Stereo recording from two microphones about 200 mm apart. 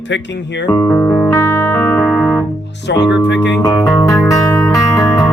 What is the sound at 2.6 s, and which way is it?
Music, 60° left (ahead or behind).